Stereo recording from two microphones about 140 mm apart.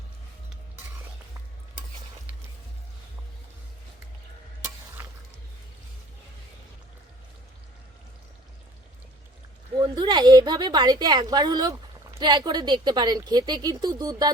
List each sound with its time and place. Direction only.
9.7 s a woman's voice: 30° right (ahead or behind)